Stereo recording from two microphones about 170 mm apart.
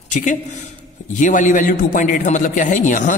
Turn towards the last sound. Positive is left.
turn(degrees=50)  # may be behind; listen again after turning